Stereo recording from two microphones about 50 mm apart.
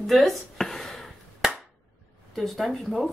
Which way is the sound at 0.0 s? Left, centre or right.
Centre.